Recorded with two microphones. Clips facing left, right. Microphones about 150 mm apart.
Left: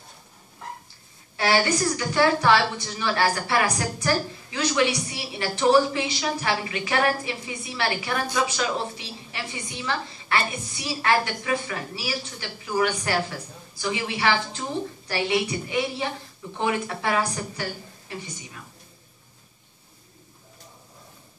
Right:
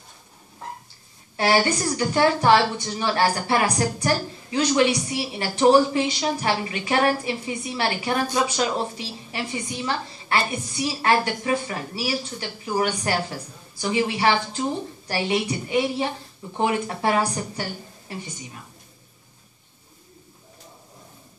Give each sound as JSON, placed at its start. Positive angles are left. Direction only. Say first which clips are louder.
{"t": 1.3, "sound": "a woman's voice", "louder": "right 2 dB", "side_deg": -30}